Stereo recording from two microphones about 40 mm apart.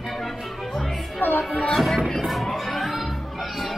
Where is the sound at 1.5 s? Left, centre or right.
Left.